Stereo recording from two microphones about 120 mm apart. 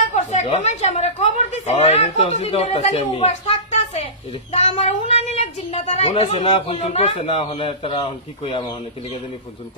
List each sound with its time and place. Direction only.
0.1 s a woman's voice: 65° left (ahead or behind); by 8.6 s 50° left (ahead or behind)